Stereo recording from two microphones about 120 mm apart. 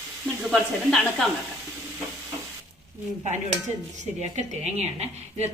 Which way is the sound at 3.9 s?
80° right.